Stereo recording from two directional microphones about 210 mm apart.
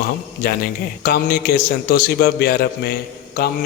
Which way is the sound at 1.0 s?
45° left (ahead or behind).